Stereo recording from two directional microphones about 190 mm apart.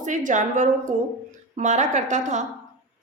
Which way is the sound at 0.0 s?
40° right (ahead or behind).